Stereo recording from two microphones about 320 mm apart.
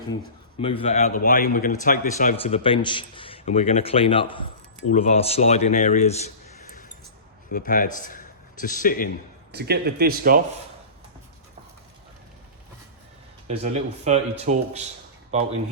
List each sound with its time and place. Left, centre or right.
0.6 s a man's voice: centre
9.5 s speech: right
13.5 s speech: centre